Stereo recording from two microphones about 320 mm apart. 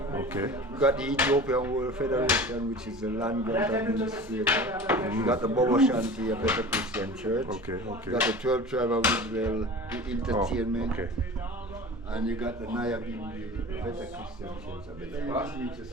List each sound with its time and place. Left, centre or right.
0.1 s speech: centre
12.1 s speech: centre
15.2 s speech: centre